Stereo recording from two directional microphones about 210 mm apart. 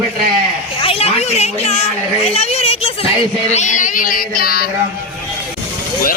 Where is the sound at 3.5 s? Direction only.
35° left (ahead or behind).